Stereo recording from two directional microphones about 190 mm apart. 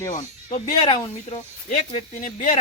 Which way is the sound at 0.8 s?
30° left (ahead or behind).